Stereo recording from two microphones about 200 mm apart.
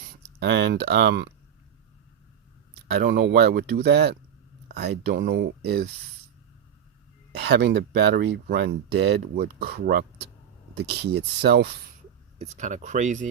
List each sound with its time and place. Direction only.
0.3 s speech: 55° right (ahead or behind)
2.8 s speech: 55° right (ahead or behind)
7.3 s speech: 55° right (ahead or behind)
12.4 s speech: 40° right (ahead or behind)